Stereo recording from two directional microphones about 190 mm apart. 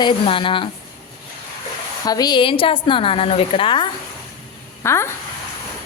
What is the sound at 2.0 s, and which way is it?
A woman's voice, 20° left (ahead or behind).